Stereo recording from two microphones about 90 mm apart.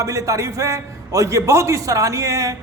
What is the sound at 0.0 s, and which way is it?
A man's voice, 35° right (ahead or behind).